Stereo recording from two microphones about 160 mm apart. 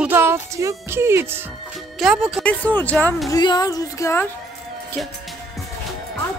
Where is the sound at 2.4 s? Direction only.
10° left (ahead or behind).